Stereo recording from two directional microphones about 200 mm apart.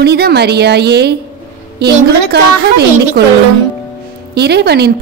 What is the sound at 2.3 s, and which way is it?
Speech, 55° right (ahead or behind).